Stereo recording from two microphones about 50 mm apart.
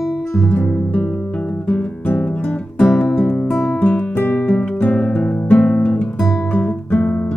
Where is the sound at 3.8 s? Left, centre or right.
Left.